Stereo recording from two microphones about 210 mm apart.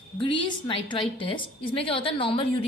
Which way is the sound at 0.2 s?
25° left (ahead or behind).